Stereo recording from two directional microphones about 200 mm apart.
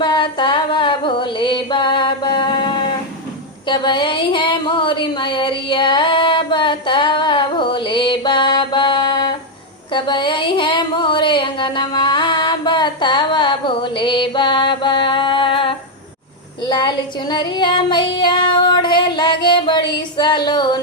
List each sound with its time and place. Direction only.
0.0 s a sound: 25° left (ahead or behind)
16.6 s female singing: 20° left (ahead or behind)
19.9 s a woman's voice: 20° left (ahead or behind)